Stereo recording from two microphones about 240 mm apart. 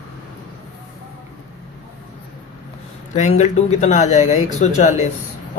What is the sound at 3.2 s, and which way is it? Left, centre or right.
Speech, left.